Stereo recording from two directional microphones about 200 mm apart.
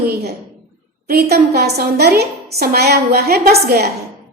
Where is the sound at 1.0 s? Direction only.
50° right (ahead or behind).